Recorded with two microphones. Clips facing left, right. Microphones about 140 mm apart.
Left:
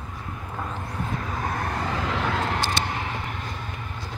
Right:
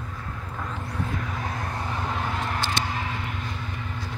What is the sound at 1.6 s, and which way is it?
Vehicle, 80° left.